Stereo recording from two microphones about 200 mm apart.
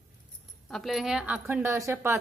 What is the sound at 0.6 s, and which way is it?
A woman's voice, centre (ahead or behind).